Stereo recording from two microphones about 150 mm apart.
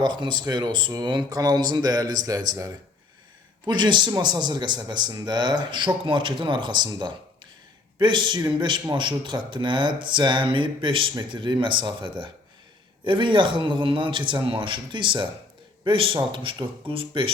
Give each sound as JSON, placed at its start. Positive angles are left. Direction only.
{"t": 0.0, "sound": "speech", "side_deg": -30}